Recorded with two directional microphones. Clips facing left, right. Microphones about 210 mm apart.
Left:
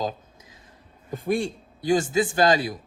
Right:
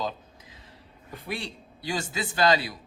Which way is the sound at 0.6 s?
45° left (ahead or behind).